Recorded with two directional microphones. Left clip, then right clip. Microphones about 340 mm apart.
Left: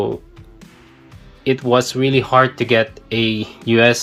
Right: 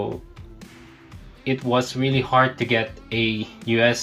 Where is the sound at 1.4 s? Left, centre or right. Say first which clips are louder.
Left 7 dB; centre.